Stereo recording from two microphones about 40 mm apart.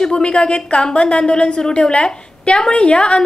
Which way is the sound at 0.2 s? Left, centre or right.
Centre.